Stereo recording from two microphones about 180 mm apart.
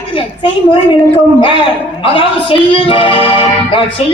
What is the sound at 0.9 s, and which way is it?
Speech, 30° left (ahead or behind).